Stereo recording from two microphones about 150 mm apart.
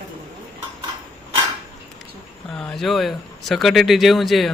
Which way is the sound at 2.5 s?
5° left (ahead or behind).